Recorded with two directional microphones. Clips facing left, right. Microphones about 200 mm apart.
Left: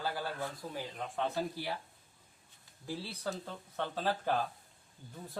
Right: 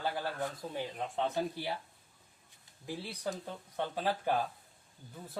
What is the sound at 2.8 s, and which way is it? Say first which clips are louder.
Speech: right 1 dB; 15° right (ahead or behind).